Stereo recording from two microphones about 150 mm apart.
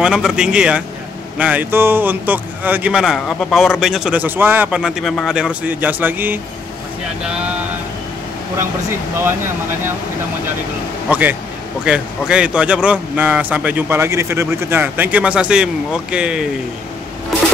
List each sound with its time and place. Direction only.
0.0 s speech: 5° right (ahead or behind)
11.1 s speech: 10° right (ahead or behind)